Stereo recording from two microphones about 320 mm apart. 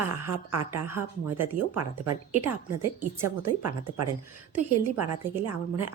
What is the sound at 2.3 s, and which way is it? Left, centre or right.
Speech, right.